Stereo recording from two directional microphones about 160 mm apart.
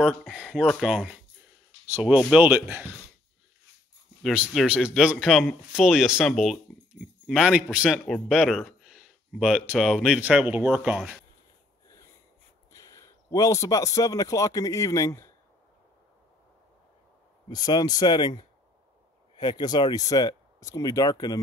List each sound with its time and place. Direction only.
0.0 s speech: centre (ahead or behind)
4.2 s speech: 5° right (ahead or behind)
12.7 s a man's voice: 20° left (ahead or behind)
17.5 s speech: 25° left (ahead or behind)